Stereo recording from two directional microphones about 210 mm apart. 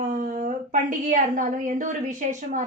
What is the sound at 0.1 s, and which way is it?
A woman's voice, 40° right (ahead or behind).